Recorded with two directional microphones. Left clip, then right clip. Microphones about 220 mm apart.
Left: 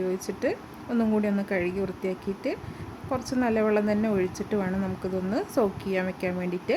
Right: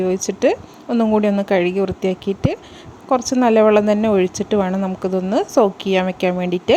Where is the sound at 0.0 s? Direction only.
35° right (ahead or behind).